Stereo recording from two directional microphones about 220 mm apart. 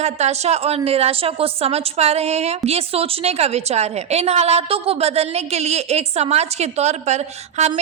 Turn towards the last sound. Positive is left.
turn(degrees=-30)  # may be behind; listen again after turning